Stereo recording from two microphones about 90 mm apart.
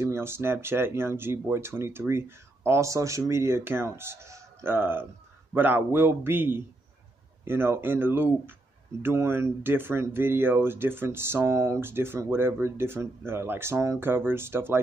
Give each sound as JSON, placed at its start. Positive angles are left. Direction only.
{"t": 0.0, "sound": "speech", "side_deg": -30}